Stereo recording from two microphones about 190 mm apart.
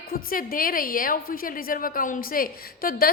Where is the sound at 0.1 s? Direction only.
50° left (ahead or behind).